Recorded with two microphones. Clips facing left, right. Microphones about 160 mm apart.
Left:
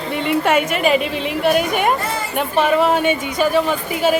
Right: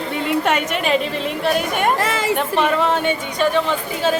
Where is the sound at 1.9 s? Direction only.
90° right.